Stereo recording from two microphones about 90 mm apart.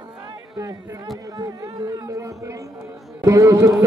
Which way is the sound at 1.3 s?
40° right (ahead or behind).